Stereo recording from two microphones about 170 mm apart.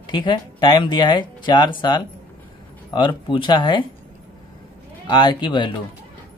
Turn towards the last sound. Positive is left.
turn(degrees=25)  # may be behind; listen again after turning